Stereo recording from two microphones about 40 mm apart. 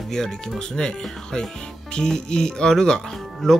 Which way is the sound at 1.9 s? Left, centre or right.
Centre.